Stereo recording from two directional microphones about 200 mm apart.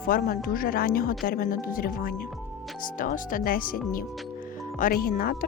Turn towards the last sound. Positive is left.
turn(degrees=45)  # may be behind; listen again after turning